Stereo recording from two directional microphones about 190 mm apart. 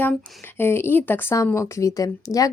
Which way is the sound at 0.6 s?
10° left (ahead or behind).